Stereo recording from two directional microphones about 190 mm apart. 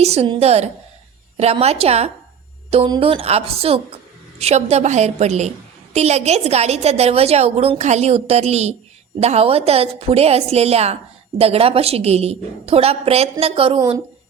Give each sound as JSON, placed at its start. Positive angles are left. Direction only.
{"t": 0.0, "sound": "a woman's voice", "side_deg": -35}